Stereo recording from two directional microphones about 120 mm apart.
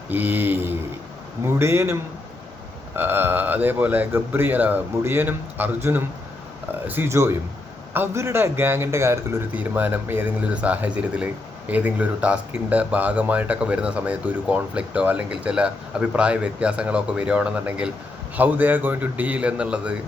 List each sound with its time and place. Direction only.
0.1 s a man's voice: 15° right (ahead or behind)